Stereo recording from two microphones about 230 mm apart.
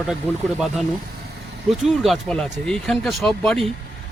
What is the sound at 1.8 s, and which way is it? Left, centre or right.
Speech, centre.